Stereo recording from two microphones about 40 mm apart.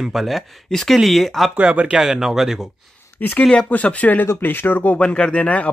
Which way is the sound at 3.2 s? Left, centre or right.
Left.